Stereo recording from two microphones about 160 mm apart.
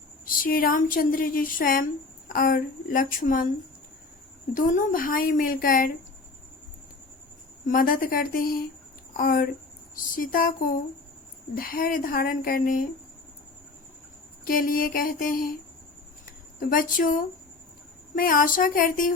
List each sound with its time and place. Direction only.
0.3 s a woman's voice: 60° left (ahead or behind)
4.5 s a woman's voice: 55° left (ahead or behind)
7.7 s a woman's voice: 60° left (ahead or behind)
11.5 s a woman's voice: 65° left (ahead or behind)
14.4 s a woman's voice: 60° left (ahead or behind)
16.6 s a woman's voice: 60° left (ahead or behind)